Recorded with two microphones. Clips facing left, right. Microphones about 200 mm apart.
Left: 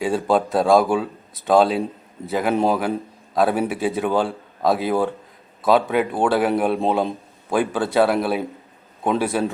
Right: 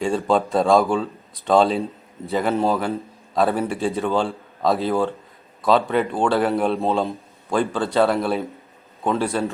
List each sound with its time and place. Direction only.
0.3 s speech: 5° left (ahead or behind)
2.5 s a man's voice: 15° left (ahead or behind)